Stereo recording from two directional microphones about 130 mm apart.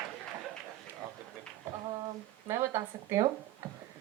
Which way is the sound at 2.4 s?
25° right (ahead or behind).